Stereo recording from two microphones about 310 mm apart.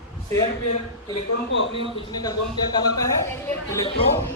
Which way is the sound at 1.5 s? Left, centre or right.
Left.